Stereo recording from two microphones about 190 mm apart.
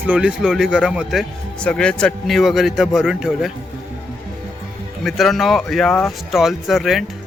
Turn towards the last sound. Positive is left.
turn(degrees=0)  # may be behind; listen again after turning